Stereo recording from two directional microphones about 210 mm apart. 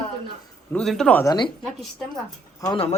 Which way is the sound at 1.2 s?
20° left (ahead or behind).